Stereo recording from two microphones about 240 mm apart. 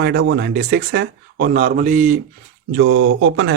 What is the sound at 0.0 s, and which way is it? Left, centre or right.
Speech, right.